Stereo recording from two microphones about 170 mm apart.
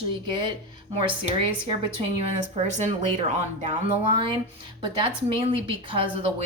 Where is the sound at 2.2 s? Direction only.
40° right (ahead or behind).